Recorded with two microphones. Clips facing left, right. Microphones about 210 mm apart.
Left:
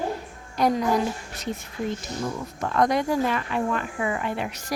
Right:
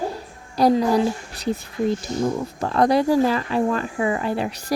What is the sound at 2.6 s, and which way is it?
A woman's voice, 35° right (ahead or behind).